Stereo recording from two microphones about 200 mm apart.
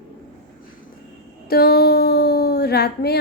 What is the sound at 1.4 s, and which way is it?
Speech, 50° left (ahead or behind).